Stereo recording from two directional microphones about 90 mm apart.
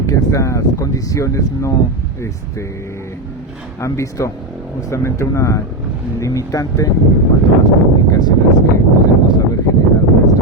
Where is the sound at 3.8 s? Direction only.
35° left (ahead or behind).